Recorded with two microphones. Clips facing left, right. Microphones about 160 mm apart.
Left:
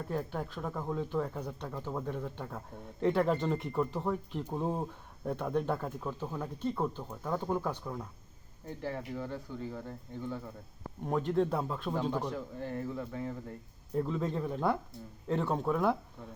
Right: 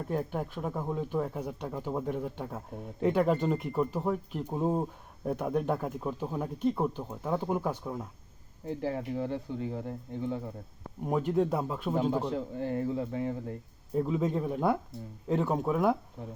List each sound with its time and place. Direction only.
0.1 s speech: 15° right (ahead or behind)
8.6 s speech: 25° right (ahead or behind)
11.0 s speech: 10° right (ahead or behind)
12.1 s speech: 30° right (ahead or behind)
13.9 s speech: 5° right (ahead or behind)